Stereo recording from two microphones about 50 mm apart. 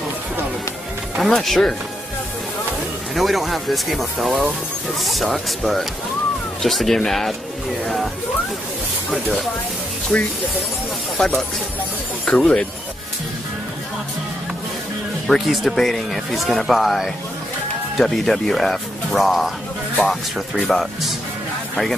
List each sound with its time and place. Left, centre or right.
1.2 s speech: centre
3.2 s speech: centre
6.6 s speech: centre
10.1 s speech: left
11.1 s speech: centre
15.2 s speech: centre
20.6 s speech: centre